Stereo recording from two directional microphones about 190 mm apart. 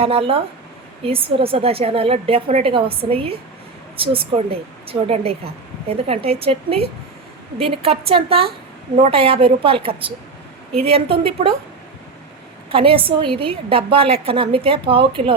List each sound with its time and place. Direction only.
0.0 s a woman's voice: 30° right (ahead or behind)
12.7 s a woman's voice: 30° right (ahead or behind)